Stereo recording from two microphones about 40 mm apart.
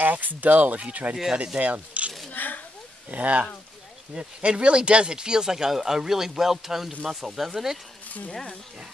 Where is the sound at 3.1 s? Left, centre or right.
Right; by 7.7 s centre.